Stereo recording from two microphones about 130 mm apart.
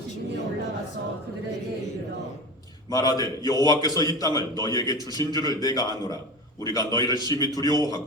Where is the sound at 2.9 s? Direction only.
30° left (ahead or behind).